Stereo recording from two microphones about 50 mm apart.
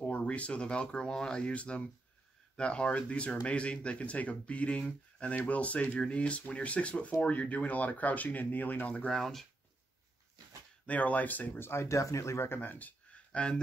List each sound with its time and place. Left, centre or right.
0.0 s speech: left
9.1 s speech: centre
10.9 s speech: left
11.6 s speech: left
12.5 s speech: left